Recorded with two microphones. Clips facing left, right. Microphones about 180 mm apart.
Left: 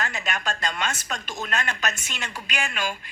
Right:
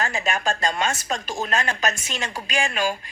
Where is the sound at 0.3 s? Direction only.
30° right (ahead or behind).